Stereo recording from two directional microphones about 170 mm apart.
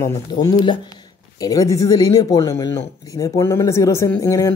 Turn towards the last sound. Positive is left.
turn(degrees=20)  # may be behind; listen again after turning